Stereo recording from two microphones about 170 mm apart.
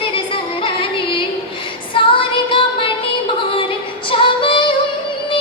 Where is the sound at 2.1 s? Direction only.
30° left (ahead or behind).